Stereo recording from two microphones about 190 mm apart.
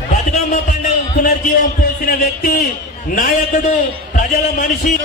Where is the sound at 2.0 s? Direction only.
50° left (ahead or behind).